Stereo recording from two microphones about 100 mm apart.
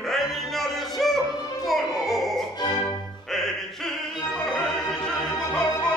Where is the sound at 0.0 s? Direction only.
Centre (ahead or behind).